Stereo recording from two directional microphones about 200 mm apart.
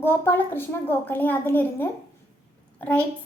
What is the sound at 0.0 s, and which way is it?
A woman's voice, 10° left (ahead or behind).